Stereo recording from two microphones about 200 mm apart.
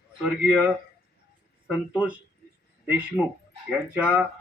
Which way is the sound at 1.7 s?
5° right (ahead or behind).